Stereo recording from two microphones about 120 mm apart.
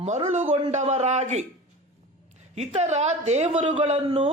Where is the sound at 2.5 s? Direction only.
70° right (ahead or behind).